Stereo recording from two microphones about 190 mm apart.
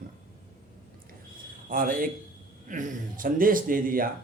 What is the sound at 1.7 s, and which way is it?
Speech, 45° right (ahead or behind).